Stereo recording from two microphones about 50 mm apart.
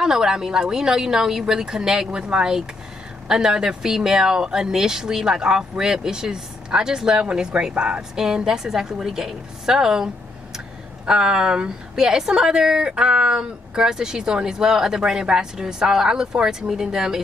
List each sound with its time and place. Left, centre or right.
0.0 s a woman's voice: centre